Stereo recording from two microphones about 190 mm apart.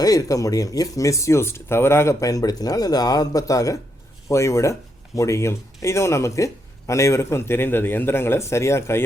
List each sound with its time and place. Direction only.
0.0 s speech: 20° left (ahead or behind)